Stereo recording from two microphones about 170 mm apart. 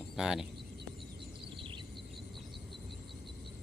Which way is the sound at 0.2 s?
5° right (ahead or behind).